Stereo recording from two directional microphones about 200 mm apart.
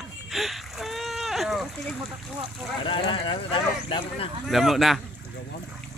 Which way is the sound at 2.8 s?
25° left (ahead or behind).